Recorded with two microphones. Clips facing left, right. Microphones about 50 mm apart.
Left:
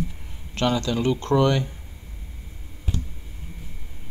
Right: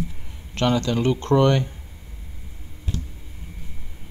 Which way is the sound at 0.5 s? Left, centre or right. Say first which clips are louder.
Right 2 dB; right.